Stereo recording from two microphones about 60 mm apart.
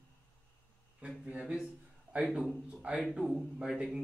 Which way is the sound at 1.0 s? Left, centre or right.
Right.